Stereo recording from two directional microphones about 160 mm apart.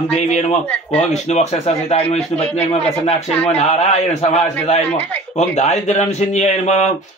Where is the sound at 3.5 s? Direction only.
45° left (ahead or behind).